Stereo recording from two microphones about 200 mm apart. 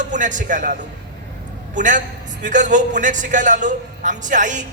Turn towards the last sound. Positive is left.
turn(degrees=-40)  # may be behind; listen again after turning